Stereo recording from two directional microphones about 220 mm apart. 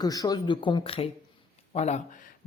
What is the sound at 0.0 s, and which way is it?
Speech, 15° left (ahead or behind).